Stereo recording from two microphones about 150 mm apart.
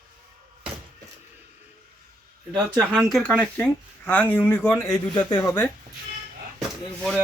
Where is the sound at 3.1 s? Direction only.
5° left (ahead or behind).